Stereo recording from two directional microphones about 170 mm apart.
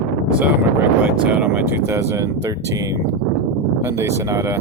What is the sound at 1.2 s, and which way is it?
Speech, 10° right (ahead or behind).